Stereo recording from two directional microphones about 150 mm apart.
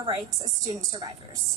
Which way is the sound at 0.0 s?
25° right (ahead or behind).